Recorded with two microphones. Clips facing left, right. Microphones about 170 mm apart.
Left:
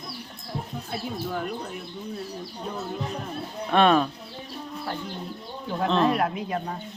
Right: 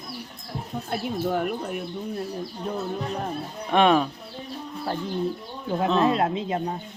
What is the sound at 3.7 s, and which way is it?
Speech, 15° right (ahead or behind).